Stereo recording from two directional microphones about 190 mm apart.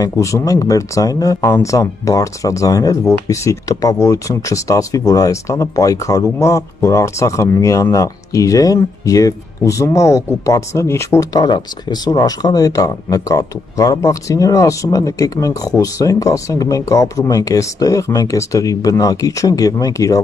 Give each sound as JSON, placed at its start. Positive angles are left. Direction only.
{"t": 0.0, "sound": "speech", "side_deg": 15}